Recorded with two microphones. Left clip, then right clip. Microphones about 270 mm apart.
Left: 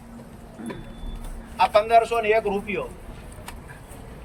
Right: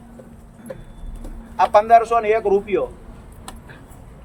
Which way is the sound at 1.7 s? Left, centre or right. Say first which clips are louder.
Right 6 dB; centre.